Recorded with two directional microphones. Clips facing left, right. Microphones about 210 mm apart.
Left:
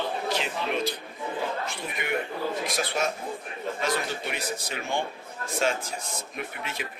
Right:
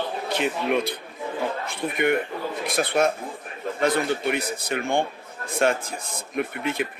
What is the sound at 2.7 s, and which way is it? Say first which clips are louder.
A man's voice: right 6 dB; 55° right (ahead or behind).